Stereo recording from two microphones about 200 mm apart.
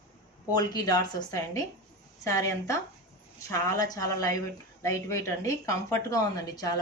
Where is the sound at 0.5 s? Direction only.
20° left (ahead or behind).